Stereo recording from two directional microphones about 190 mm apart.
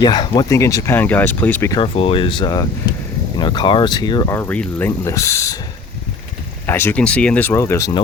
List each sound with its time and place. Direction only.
0.0 s speech: 20° left (ahead or behind)
1.7 s speech: 30° left (ahead or behind)
6.7 s speech: 10° left (ahead or behind)